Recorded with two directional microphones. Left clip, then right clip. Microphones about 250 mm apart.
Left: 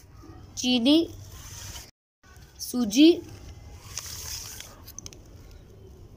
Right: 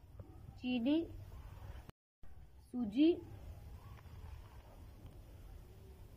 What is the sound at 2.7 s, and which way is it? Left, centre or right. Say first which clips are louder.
Speech: left 14 dB; centre.